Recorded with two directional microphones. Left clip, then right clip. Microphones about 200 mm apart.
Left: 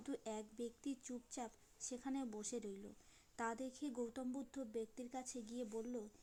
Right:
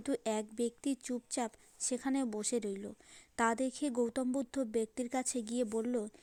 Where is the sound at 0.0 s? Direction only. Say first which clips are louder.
Right 12 dB; 30° right (ahead or behind).